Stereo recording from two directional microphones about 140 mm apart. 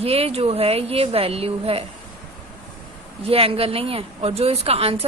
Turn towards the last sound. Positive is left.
turn(degrees=-45)  # may be behind; listen again after turning